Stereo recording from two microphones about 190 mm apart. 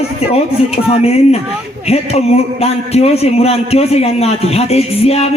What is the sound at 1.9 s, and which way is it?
Speech, 35° left (ahead or behind).